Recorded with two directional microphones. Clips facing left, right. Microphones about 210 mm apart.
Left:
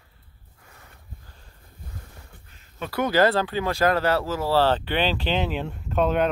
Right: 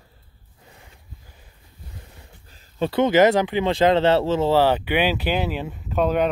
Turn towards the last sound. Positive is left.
turn(degrees=0)  # may be behind; listen again after turning